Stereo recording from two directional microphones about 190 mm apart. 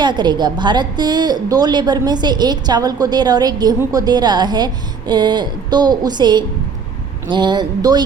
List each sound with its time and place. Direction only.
0.0 s a woman's voice: 25° right (ahead or behind)